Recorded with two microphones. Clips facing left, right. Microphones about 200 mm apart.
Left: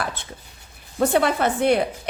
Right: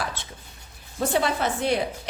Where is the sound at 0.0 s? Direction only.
55° left (ahead or behind).